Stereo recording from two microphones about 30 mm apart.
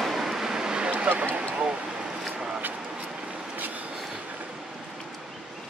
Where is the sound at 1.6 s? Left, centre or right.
Right.